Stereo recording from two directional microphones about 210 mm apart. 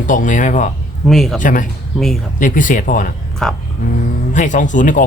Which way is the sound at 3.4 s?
Centre (ahead or behind).